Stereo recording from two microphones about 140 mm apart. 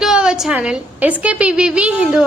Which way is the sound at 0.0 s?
5° right (ahead or behind).